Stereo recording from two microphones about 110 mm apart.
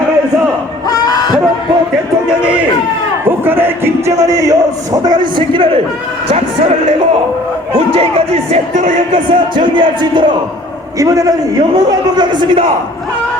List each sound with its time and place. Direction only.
0.9 s a sound: 35° left (ahead or behind)
3.2 s speech: 20° right (ahead or behind)
5.0 s speech: 45° right (ahead or behind)
6.3 s a man's voice: 80° right
7.9 s speech: 60° right (ahead or behind); by 8.8 s 75° right (ahead or behind)
9.1 s speech: 50° right (ahead or behind)
10.9 s a man's voice: 30° right (ahead or behind)